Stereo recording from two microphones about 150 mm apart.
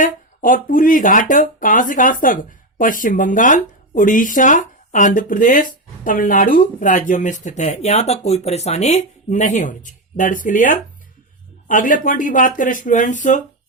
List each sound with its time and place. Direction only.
0.0 s speech: 65° left (ahead or behind)